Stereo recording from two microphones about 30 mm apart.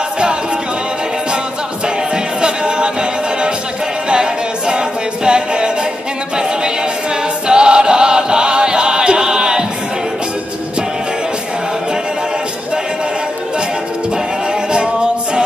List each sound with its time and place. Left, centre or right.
2.4 s music: right
4.1 s a capella: right
7.4 s chant: right
14.7 s a capella: right